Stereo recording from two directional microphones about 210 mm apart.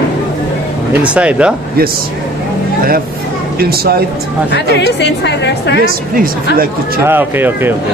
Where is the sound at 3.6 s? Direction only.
45° right (ahead or behind).